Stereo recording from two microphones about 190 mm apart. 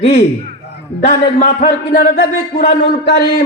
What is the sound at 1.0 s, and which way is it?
Speech, 40° left (ahead or behind).